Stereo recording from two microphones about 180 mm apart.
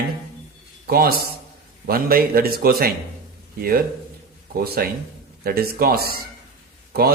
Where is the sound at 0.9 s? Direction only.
55° right (ahead or behind).